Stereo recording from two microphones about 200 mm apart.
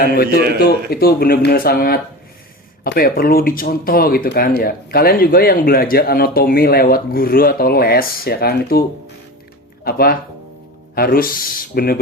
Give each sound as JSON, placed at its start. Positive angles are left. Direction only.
{"t": 0.6, "sound": "speech", "side_deg": 50}
{"t": 9.8, "sound": "speech", "side_deg": 50}